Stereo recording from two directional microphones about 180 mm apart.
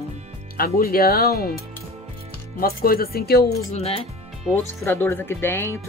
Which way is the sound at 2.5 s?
55° left (ahead or behind).